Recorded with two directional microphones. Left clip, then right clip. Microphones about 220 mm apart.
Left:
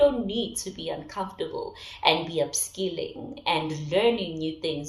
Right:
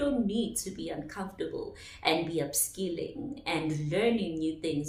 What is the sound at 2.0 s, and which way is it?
Speech, 20° right (ahead or behind).